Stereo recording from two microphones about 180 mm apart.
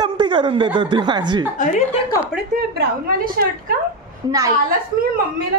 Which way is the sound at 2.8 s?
55° right (ahead or behind).